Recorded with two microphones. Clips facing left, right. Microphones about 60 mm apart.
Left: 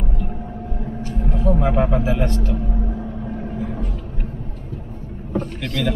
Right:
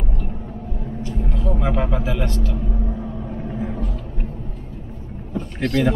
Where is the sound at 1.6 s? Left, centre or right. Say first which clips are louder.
Left 1 dB; centre.